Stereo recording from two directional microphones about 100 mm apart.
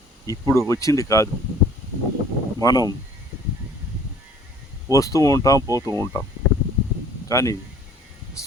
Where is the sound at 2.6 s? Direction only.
40° left (ahead or behind).